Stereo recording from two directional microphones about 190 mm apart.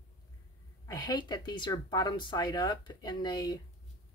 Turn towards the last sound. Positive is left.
turn(degrees=20)  # may be behind; listen again after turning